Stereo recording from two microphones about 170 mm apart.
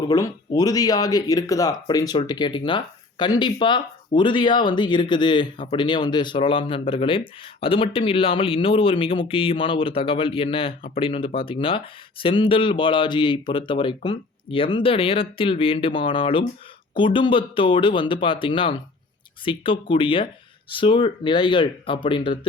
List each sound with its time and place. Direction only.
0.1 s speech: 20° left (ahead or behind)